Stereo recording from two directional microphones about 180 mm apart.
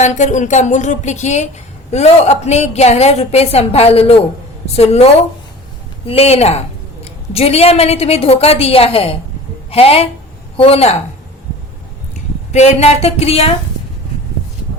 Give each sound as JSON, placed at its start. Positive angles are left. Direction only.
{"t": 0.0, "sound": "a woman's voice", "side_deg": 40}
{"t": 12.5, "sound": "a woman's voice", "side_deg": 35}